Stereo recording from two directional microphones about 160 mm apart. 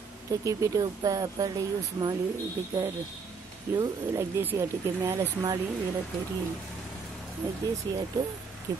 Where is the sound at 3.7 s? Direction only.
15° right (ahead or behind).